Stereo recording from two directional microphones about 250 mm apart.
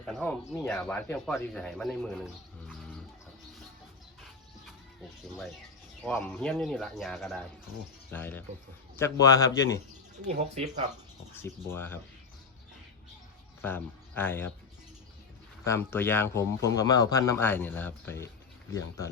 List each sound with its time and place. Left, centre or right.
0.0 s speech: centre
6.0 s speech: centre
10.2 s speech: right
11.4 s speech: centre
13.6 s speech: centre
15.6 s speech: centre